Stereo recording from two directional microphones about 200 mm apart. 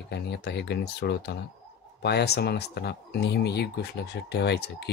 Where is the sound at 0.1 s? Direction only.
55° left (ahead or behind).